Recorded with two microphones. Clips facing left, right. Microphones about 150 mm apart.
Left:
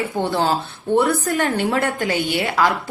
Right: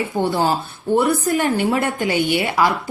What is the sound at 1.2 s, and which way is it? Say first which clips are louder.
Speech: right 2 dB; 10° right (ahead or behind).